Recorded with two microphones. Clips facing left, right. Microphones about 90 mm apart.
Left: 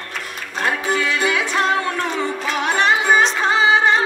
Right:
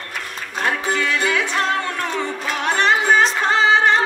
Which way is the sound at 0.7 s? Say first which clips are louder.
Left 1 dB; 10° left (ahead or behind).